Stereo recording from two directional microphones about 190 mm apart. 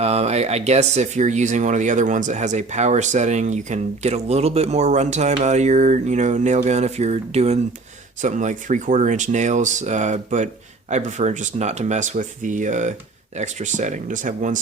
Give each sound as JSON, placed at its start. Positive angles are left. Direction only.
{"t": 0.0, "sound": "speech", "side_deg": -35}